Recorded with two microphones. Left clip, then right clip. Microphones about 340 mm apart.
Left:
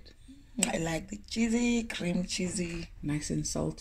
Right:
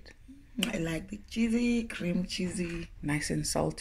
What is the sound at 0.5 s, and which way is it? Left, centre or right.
Speech, centre.